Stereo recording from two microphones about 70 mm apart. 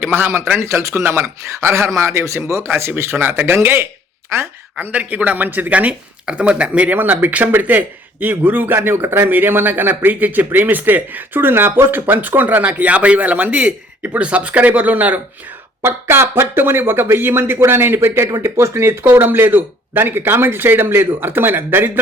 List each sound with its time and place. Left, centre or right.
0.0 s speech: right
4.9 s speech: right
15.8 s speech: right